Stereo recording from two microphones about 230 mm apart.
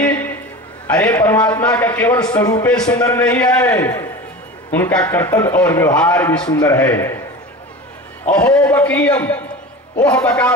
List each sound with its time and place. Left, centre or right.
0.0 s a sound: centre
0.8 s a man's voice: centre
8.3 s a man's voice: centre